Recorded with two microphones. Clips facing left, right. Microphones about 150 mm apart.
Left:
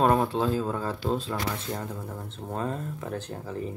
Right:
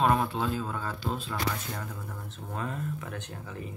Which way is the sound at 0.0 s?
35° left (ahead or behind).